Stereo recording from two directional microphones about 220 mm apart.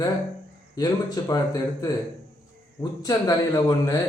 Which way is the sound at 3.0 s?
15° left (ahead or behind).